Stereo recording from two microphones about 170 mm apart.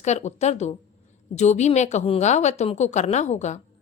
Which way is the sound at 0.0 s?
40° left (ahead or behind).